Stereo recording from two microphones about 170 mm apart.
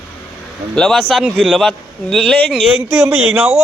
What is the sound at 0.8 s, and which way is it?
A man's voice, centre (ahead or behind).